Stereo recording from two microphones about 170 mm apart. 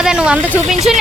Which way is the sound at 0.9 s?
Centre (ahead or behind).